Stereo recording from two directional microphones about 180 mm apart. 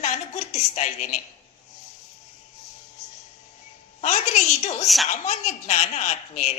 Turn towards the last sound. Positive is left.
turn(degrees=40)  # may be behind; listen again after turning